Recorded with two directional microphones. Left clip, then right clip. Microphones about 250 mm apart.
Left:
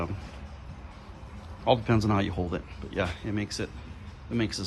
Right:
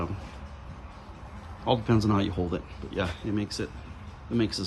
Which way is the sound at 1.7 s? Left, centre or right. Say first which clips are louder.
Even; centre.